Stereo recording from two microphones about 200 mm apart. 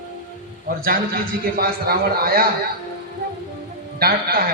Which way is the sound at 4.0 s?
50° right (ahead or behind).